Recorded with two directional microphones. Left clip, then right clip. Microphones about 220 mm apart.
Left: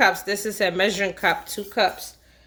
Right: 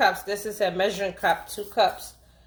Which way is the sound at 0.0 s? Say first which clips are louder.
Left 3 dB; 45° left (ahead or behind).